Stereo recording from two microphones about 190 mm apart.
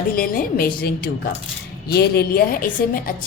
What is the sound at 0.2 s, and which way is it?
A woman's voice, 50° left (ahead or behind).